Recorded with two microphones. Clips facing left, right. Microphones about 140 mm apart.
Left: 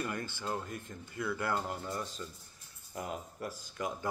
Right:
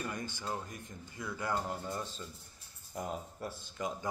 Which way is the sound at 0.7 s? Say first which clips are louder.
Left 4 dB; 60° left (ahead or behind).